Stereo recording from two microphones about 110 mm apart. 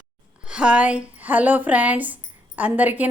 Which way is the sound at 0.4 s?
10° right (ahead or behind).